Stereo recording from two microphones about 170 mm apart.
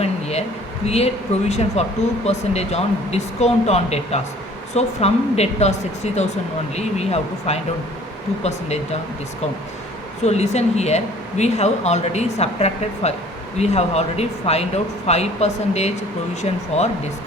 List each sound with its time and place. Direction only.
0.0 s a sound: 40° left (ahead or behind)
0.9 s speech: 40° left (ahead or behind)
6.7 s speech: 40° left (ahead or behind)
10.2 s speech: 40° left (ahead or behind)